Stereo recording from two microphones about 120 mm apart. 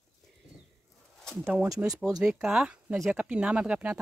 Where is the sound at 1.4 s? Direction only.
15° right (ahead or behind).